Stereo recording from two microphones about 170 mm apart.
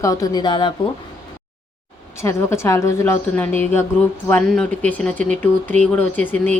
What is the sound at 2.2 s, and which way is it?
Speech, 15° left (ahead or behind).